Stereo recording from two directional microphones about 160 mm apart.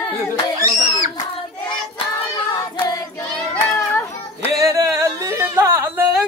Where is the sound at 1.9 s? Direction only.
30° left (ahead or behind).